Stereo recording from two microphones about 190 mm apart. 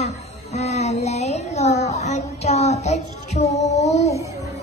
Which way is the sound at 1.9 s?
35° left (ahead or behind).